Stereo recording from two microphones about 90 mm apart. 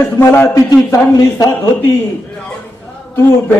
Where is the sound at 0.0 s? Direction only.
25° left (ahead or behind); by 1.5 s 40° left (ahead or behind).